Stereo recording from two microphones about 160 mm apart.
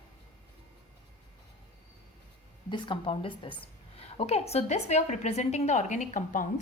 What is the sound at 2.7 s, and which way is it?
A woman's voice, 35° left (ahead or behind).